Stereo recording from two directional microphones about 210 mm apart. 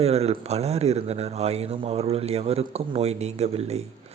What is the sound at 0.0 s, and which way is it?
Speech, 30° right (ahead or behind).